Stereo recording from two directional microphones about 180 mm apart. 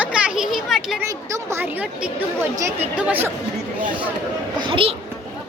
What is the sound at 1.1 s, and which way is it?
Speech, 15° right (ahead or behind).